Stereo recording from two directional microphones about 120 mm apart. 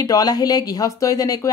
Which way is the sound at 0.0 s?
30° left (ahead or behind).